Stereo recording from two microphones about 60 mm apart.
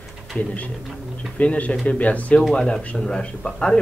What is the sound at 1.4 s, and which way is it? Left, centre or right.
Speech, left.